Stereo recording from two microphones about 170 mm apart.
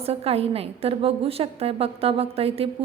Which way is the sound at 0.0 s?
35° right (ahead or behind).